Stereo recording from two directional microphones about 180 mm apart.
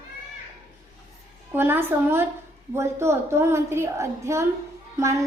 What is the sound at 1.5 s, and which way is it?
A woman's voice, 10° right (ahead or behind).